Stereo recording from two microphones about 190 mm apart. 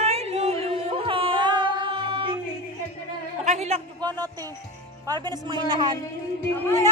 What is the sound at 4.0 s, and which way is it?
A man's voice, 20° right (ahead or behind).